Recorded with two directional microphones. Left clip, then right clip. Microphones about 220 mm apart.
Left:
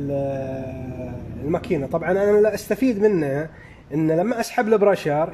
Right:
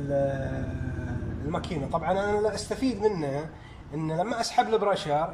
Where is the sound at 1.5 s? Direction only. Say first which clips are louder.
Left 7 dB; 35° left (ahead or behind).